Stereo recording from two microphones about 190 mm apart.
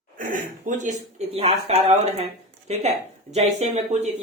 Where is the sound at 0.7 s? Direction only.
40° right (ahead or behind).